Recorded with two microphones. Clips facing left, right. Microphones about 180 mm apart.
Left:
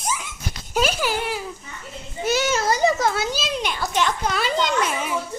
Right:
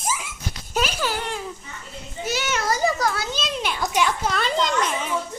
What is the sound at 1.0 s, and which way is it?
Speech, 10° left (ahead or behind).